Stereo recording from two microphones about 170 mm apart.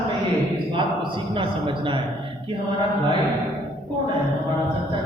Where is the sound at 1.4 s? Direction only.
30° right (ahead or behind).